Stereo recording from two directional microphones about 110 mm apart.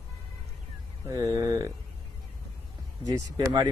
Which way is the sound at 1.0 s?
25° right (ahead or behind).